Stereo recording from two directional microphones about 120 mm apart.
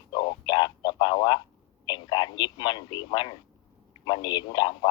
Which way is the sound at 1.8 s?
35° left (ahead or behind).